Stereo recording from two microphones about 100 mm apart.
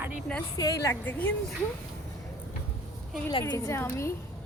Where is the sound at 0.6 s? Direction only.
35° left (ahead or behind).